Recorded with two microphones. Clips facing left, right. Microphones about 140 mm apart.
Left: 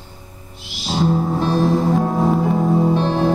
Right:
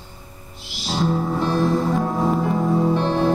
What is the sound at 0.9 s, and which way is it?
Music, 10° left (ahead or behind).